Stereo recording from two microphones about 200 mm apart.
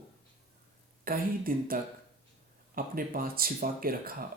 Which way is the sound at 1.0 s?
45° right (ahead or behind).